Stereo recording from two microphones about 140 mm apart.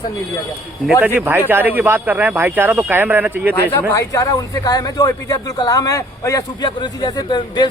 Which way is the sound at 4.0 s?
25° left (ahead or behind).